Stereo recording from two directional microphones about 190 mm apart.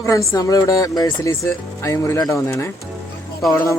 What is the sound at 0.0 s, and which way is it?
Speech, 15° left (ahead or behind).